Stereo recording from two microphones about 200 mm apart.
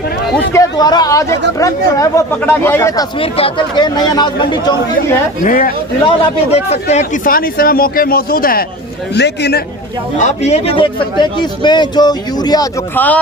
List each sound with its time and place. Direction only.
0.5 s speech: 20° left (ahead or behind)
5.5 s speech: 45° left (ahead or behind)
6.1 s speech: 30° left (ahead or behind); by 8.6 s 45° left (ahead or behind)
9.1 s a man's voice: 55° left (ahead or behind)
10.2 s speech: 35° left (ahead or behind); by 13.0 s 20° left (ahead or behind)